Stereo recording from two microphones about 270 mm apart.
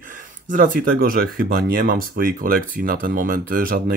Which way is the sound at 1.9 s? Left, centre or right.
Right.